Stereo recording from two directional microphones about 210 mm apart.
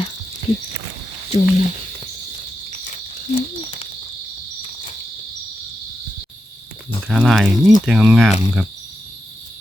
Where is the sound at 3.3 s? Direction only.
25° left (ahead or behind).